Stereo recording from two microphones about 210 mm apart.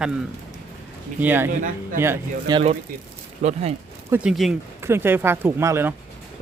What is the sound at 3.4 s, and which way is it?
Speech, 30° right (ahead or behind).